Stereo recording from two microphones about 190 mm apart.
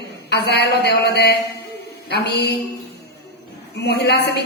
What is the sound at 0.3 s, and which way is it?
Speech, 60° left (ahead or behind).